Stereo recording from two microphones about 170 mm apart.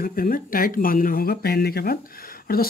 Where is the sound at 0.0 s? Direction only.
55° left (ahead or behind).